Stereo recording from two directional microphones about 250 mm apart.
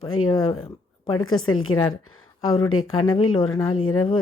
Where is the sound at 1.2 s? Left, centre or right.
Left.